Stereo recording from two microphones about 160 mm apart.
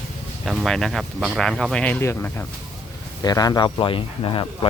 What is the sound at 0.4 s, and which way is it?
Speech, centre (ahead or behind).